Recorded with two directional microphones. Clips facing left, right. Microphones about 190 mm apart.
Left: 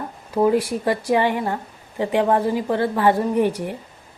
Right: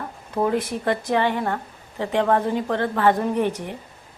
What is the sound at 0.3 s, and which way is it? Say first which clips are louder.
A woman's voice: left 4 dB; 10° left (ahead or behind).